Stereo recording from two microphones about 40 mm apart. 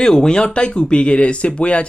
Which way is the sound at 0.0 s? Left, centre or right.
Centre.